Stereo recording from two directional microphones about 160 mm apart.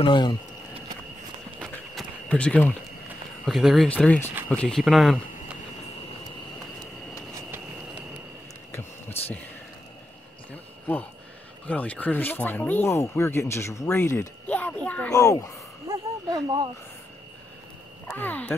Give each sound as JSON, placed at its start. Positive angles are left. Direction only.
{"t": 0.0, "sound": "speech", "side_deg": 30}
{"t": 1.6, "sound": "a sound", "side_deg": 5}
{"t": 3.4, "sound": "speech", "side_deg": 0}
{"t": 8.7, "sound": "heart sounds", "side_deg": 15}
{"t": 10.5, "sound": "a sound", "side_deg": 10}
{"t": 11.6, "sound": "speech", "side_deg": 10}
{"t": 15.1, "sound": "speech", "side_deg": 20}
{"t": 16.4, "sound": "speech", "side_deg": -30}
{"t": 18.0, "sound": "speech", "side_deg": 10}